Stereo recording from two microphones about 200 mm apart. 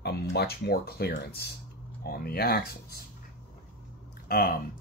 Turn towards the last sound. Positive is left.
turn(degrees=50)  # may be behind; listen again after turning